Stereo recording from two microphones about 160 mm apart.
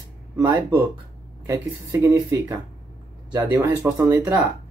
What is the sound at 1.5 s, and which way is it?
Speech, 20° right (ahead or behind).